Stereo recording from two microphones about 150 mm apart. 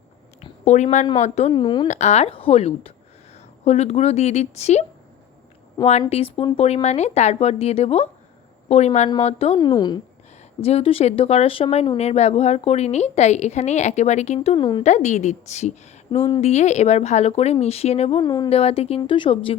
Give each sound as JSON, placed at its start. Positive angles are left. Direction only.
{"t": 0.6, "sound": "a woman's voice", "side_deg": 50}
{"t": 1.5, "sound": "speech", "side_deg": 30}
{"t": 1.9, "sound": "a woman's voice", "side_deg": 50}
{"t": 9.6, "sound": "a woman's voice", "side_deg": 30}
{"t": 10.6, "sound": "a woman's voice", "side_deg": 40}
{"t": 14.8, "sound": "a woman's voice", "side_deg": 50}
{"t": 18.2, "sound": "a woman's voice", "side_deg": 25}
{"t": 18.4, "sound": "speech", "side_deg": 40}